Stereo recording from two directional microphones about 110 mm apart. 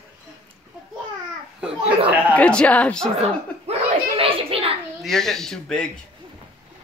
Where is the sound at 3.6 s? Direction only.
65° right (ahead or behind).